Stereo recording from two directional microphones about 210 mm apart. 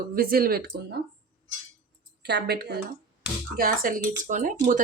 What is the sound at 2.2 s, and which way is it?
A woman's voice, 50° right (ahead or behind).